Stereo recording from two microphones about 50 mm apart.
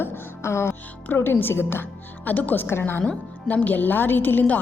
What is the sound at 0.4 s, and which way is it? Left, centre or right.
A woman's voice, left.